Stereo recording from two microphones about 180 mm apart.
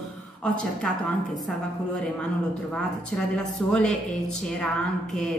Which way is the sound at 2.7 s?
5° left (ahead or behind).